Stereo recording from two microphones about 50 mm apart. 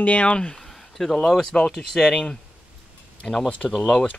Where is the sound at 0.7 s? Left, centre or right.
Centre.